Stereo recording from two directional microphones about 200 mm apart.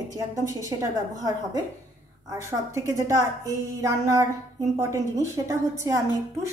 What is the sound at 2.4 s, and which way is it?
A woman's voice, 15° right (ahead or behind).